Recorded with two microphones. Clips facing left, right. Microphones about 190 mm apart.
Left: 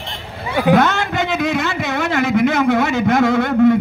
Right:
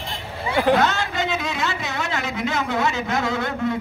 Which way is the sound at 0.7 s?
55° left (ahead or behind).